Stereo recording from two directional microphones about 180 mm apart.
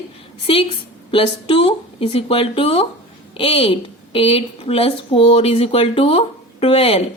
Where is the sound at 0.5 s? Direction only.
30° left (ahead or behind).